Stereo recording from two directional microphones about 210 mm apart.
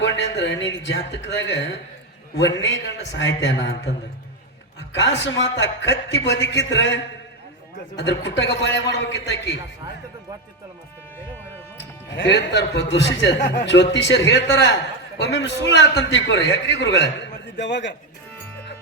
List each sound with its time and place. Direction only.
0.0 s speech: 55° left (ahead or behind)
3.1 s speech: 60° left (ahead or behind)
4.9 s speech: 55° left (ahead or behind)
12.1 s speech: 55° left (ahead or behind)